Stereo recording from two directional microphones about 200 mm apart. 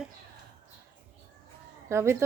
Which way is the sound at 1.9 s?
15° right (ahead or behind).